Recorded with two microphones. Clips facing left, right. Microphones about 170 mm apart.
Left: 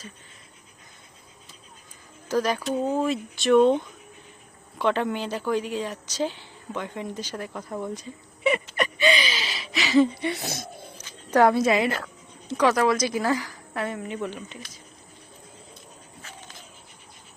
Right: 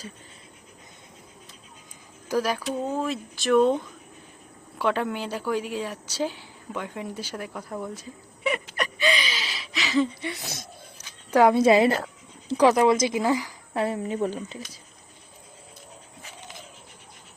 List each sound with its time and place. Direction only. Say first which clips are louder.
2.3 s a woman's voice: left 1 dB; 5° right (ahead or behind)
7.7 s a sound: left 2 dB; centre (ahead or behind)
11.3 s a woman's voice: even; 10° right (ahead or behind)
11.5 s a woman's voice: right 4 dB; 30° right (ahead or behind); by 13.6 s 15° right (ahead or behind)
13.7 s speech: right 4 dB; 30° right (ahead or behind)